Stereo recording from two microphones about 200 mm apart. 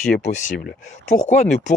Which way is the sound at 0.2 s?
40° left (ahead or behind).